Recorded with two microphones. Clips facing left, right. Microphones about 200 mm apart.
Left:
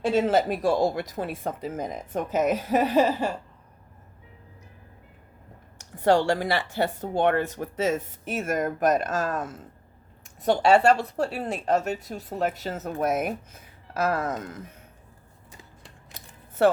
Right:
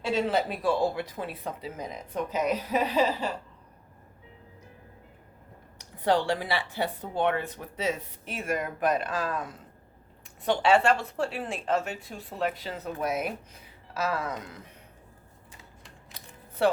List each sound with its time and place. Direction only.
0.0 s speech: 45° left (ahead or behind)
5.7 s speech: 45° left (ahead or behind)